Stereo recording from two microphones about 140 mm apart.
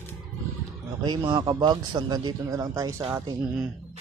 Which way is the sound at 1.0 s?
30° right (ahead or behind).